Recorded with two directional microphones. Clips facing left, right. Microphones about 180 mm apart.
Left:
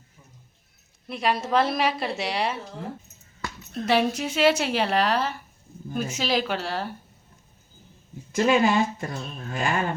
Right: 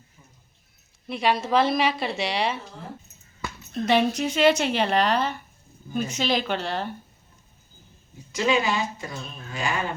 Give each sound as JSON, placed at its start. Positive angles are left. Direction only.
{"t": 1.0, "sound": "a woman's voice", "side_deg": 0}
{"t": 8.3, "sound": "speech", "side_deg": 50}